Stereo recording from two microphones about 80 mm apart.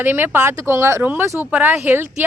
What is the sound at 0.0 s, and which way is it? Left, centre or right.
Speech, right.